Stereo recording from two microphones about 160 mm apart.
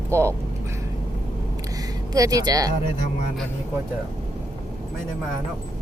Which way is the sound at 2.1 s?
25° right (ahead or behind).